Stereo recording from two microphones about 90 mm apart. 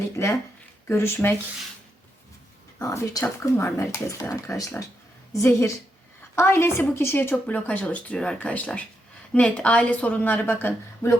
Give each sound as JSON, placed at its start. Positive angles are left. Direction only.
{"t": 0.2, "sound": "speech", "side_deg": 30}
{"t": 2.7, "sound": "speech", "side_deg": 35}